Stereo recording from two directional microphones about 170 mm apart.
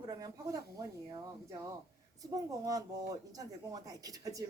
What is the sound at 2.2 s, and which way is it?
A woman's voice, 20° right (ahead or behind).